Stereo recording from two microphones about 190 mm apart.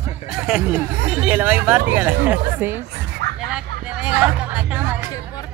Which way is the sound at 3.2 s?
60° right (ahead or behind).